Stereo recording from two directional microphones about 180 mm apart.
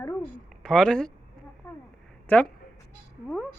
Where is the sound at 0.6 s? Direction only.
5° left (ahead or behind).